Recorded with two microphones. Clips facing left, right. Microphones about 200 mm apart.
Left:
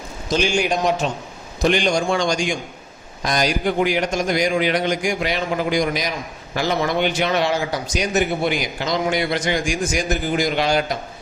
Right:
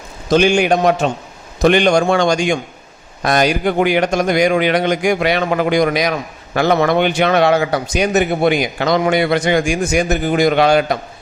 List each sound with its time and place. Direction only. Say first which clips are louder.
0.3 s a man's voice: right 7 dB; 60° right (ahead or behind)